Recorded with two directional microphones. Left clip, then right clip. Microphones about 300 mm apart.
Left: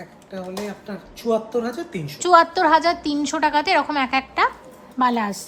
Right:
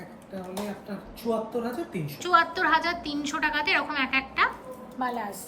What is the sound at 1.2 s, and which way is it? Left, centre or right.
A woman's voice, left.